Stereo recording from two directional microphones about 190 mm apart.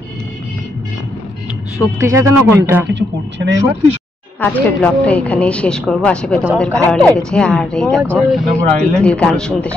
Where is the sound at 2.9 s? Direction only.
65° right (ahead or behind).